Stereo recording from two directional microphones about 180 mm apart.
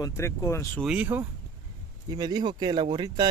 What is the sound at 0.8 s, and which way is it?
Speech, 10° right (ahead or behind).